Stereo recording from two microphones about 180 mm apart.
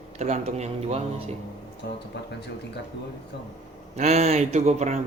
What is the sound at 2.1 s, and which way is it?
Speech, 70° left (ahead or behind).